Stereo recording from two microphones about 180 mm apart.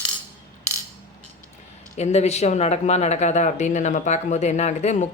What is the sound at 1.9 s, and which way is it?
Speech, 35° left (ahead or behind).